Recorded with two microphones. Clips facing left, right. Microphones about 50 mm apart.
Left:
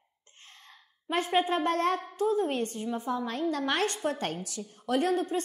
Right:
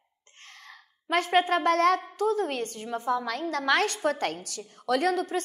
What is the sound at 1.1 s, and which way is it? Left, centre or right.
A woman's voice, right.